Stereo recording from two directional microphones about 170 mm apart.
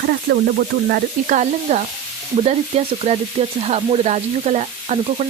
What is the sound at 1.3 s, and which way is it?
A woman's voice, 45° right (ahead or behind).